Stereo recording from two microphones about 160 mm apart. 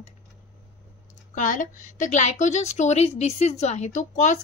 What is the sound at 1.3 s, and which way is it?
A woman's voice, 55° left (ahead or behind).